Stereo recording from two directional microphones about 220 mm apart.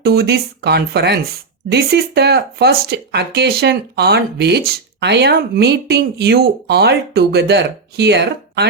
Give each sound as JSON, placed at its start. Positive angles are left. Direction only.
{"t": 0.0, "sound": "speech", "side_deg": -50}